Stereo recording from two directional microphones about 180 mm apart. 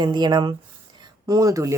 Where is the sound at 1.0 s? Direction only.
20° right (ahead or behind).